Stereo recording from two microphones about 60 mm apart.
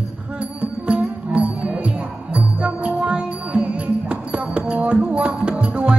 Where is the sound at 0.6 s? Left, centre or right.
Right.